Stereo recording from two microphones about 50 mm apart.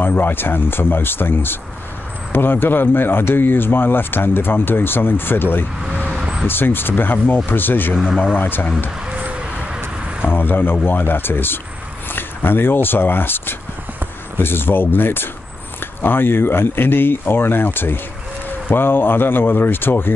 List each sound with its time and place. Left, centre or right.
0.1 s speech: left
6.1 s vehicle: centre
6.4 s speech: left
7.9 s speech: centre
8.4 s speech: left
10.3 s speech: left